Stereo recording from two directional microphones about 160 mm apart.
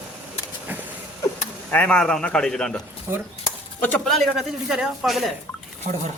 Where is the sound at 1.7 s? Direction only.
10° left (ahead or behind).